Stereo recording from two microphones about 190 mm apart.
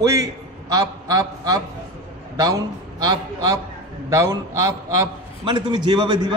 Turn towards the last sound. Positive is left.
turn(degrees=-25)  # may be behind; listen again after turning